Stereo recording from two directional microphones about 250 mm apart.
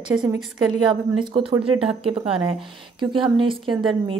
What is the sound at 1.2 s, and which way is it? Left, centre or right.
Speech, right.